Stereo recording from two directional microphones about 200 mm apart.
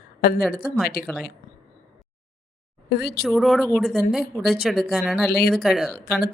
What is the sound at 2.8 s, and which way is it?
Speech, 55° left (ahead or behind).